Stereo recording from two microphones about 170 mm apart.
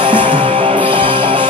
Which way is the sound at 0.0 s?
30° right (ahead or behind).